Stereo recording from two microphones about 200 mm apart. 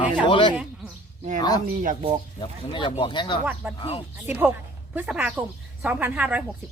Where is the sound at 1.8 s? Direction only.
40° right (ahead or behind).